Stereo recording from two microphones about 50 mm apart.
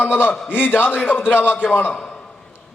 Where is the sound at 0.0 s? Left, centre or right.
Left.